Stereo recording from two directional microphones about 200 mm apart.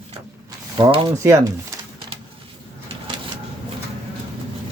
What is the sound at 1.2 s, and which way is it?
Speech, 15° right (ahead or behind).